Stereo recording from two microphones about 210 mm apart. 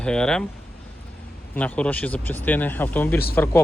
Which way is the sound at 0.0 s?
5° left (ahead or behind).